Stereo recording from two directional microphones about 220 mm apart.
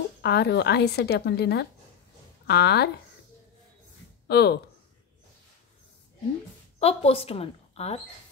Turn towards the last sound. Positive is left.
turn(degrees=30)  # may be behind; listen again after turning